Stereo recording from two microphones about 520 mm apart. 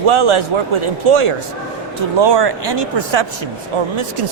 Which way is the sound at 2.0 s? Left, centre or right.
Right.